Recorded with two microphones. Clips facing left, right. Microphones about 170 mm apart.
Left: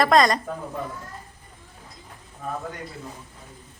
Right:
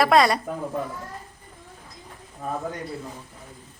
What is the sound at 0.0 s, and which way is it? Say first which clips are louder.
Speech: even; 10° right (ahead or behind).